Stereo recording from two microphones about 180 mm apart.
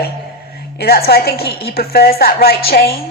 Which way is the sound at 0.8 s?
60° left (ahead or behind).